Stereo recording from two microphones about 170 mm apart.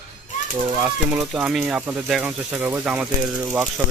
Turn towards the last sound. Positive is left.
turn(degrees=-10)  # may be behind; listen again after turning